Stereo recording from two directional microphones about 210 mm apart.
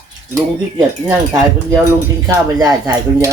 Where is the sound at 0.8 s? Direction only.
10° right (ahead or behind).